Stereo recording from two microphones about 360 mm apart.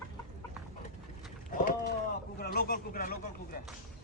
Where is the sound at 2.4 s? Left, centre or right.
Left.